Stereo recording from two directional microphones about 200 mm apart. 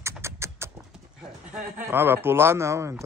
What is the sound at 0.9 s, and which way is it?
Speech, 5° right (ahead or behind).